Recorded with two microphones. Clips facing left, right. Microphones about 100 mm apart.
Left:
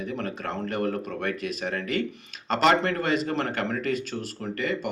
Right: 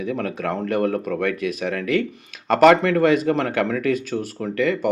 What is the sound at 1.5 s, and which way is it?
Speech, 60° right (ahead or behind).